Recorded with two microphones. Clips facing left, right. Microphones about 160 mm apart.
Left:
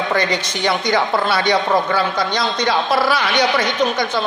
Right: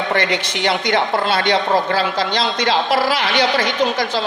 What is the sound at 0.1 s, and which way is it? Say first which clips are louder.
A woman's voice: even; 25° right (ahead or behind).